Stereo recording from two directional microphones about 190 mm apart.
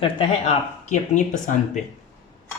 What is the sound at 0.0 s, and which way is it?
Speech, 30° left (ahead or behind).